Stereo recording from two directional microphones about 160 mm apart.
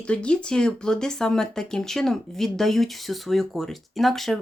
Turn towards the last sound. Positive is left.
turn(degrees=0)  # may be behind; listen again after turning